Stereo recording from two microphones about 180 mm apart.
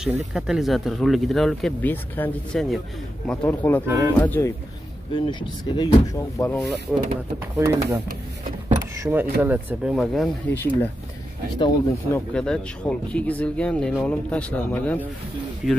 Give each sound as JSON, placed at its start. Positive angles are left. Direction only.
{"t": 0.3, "sound": "speech", "side_deg": 0}
{"t": 3.8, "sound": "speech", "side_deg": -10}
{"t": 4.2, "sound": "speech", "side_deg": 10}
{"t": 5.1, "sound": "speech", "side_deg": 25}
{"t": 6.4, "sound": "speech", "side_deg": 5}
{"t": 7.5, "sound": "speech", "side_deg": -15}
{"t": 10.5, "sound": "speech", "side_deg": 10}
{"t": 11.5, "sound": "speech", "side_deg": 25}
{"t": 12.1, "sound": "speech", "side_deg": 5}
{"t": 15.6, "sound": "speech", "side_deg": 50}